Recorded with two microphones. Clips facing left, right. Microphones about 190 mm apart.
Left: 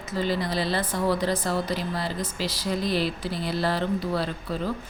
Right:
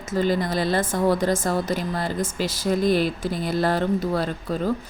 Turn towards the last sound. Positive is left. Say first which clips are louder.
# right 4 dB
turn(degrees=-45)  # may be behind; listen again after turning